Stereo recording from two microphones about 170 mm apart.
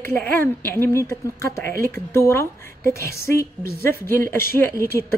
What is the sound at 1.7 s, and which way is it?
Speech, 60° right (ahead or behind).